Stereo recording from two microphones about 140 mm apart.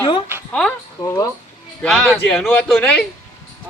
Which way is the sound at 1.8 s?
Centre (ahead or behind).